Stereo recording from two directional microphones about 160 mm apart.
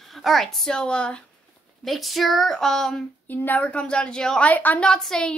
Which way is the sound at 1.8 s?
Centre (ahead or behind).